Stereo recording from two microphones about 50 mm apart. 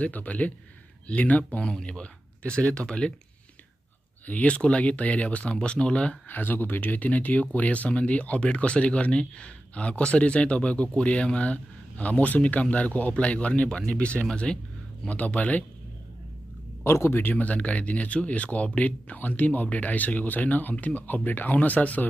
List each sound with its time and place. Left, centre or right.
0.0 s speech: left
1.6 s speech: centre
4.3 s speech: left
6.2 s speech: left
16.8 s speech: left
17.2 s speech: left